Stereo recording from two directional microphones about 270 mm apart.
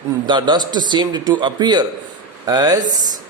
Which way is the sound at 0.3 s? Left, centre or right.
Centre.